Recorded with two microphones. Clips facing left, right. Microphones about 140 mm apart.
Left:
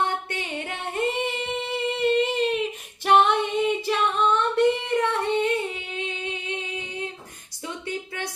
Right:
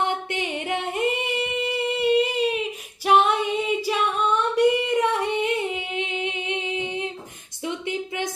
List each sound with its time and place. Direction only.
0.3 s singing: 15° right (ahead or behind)
3.1 s female singing: 5° right (ahead or behind)
7.6 s a sound: 15° right (ahead or behind)